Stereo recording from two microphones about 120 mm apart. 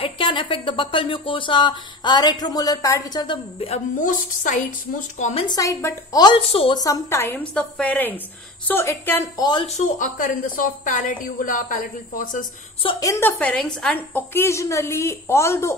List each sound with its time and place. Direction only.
0.0 s speech: 45° left (ahead or behind)
3.5 s a woman's voice: 60° left (ahead or behind); by 5.3 s 90° left
5.5 s a woman's voice: 25° left (ahead or behind)
6.2 s speech: 50° left (ahead or behind)
6.7 s a woman's voice: 30° left (ahead or behind)
7.5 s a woman's voice: 10° left (ahead or behind)
9.4 s speech: 40° left (ahead or behind)
9.8 s a woman's voice: 90° left
13.0 s a woman's voice: 25° left (ahead or behind)
13.4 s a woman's voice: 10° left (ahead or behind)